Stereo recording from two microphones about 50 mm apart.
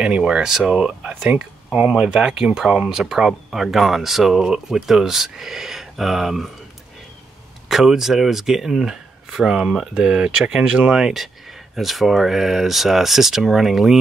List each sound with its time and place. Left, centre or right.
0.0 s speech: centre
7.6 s speech: centre